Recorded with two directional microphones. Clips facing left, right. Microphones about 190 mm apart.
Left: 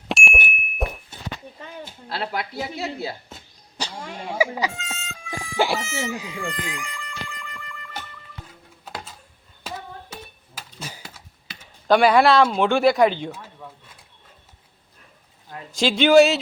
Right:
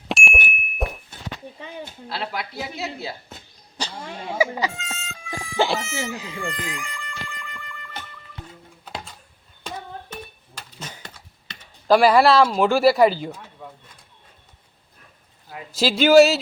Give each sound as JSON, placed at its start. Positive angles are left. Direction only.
{"t": 0.1, "sound": "ding", "side_deg": 0}
{"t": 2.0, "sound": "speech", "side_deg": 45}
{"t": 3.8, "sound": "speech", "side_deg": 10}
{"t": 4.7, "sound": "a sound", "side_deg": 0}
{"t": 5.7, "sound": "speech", "side_deg": 0}
{"t": 6.3, "sound": "music", "side_deg": 0}
{"t": 9.6, "sound": "a sound", "side_deg": 5}
{"t": 15.4, "sound": "speech", "side_deg": -5}